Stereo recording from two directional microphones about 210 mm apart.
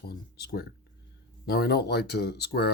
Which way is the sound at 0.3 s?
45° left (ahead or behind).